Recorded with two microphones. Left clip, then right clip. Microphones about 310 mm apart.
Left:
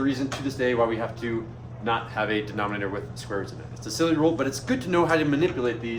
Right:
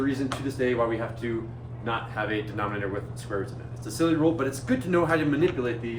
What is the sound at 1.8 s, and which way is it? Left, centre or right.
Speech, left.